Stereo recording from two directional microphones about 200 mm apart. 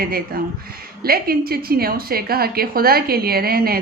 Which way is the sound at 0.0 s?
45° right (ahead or behind).